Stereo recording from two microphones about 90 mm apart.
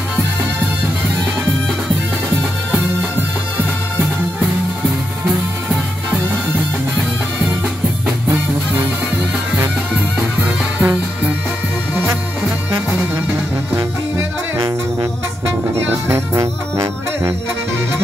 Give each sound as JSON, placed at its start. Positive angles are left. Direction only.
{"t": 10.4, "sound": "music", "side_deg": -15}
{"t": 15.7, "sound": "music", "side_deg": -30}